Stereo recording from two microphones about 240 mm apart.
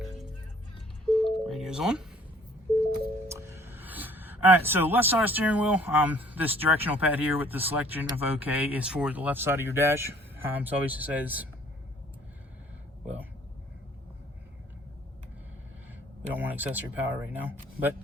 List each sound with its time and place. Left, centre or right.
1.0 s music: centre
3.2 s speech: centre
16.3 s speech: centre